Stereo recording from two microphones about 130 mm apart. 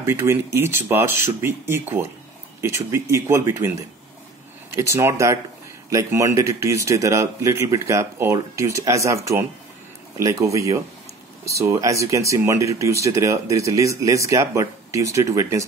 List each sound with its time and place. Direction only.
0.0 s speech: 20° right (ahead or behind)
4.7 s speech: 20° right (ahead or behind)